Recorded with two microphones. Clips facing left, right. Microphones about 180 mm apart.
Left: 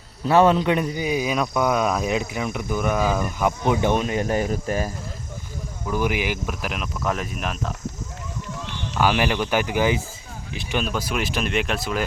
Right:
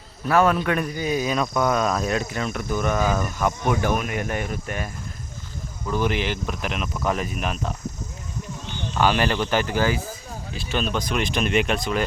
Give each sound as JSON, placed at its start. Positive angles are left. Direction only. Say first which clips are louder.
{"t": 0.3, "sound": "speech", "louder": "left 3 dB", "side_deg": 25}
{"t": 5.9, "sound": "speech", "louder": "even", "side_deg": 10}
{"t": 9.0, "sound": "speech", "louder": "even", "side_deg": 10}
{"t": 10.8, "sound": "speech", "louder": "right 1 dB", "side_deg": 5}